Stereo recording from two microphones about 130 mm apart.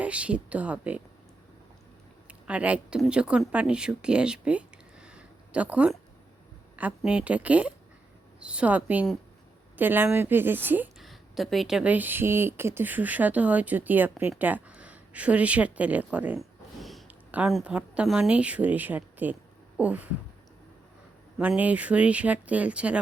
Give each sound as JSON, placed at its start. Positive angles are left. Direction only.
{"t": 0.0, "sound": "speech", "side_deg": -10}
{"t": 2.2, "sound": "speech", "side_deg": -10}
{"t": 11.0, "sound": "speech", "side_deg": 0}
{"t": 16.4, "sound": "a sound", "side_deg": 0}
{"t": 17.5, "sound": "speech", "side_deg": -10}
{"t": 21.3, "sound": "speech", "side_deg": -10}